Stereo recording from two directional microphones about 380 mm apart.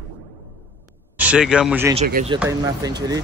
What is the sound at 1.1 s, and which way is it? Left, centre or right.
Speech, centre.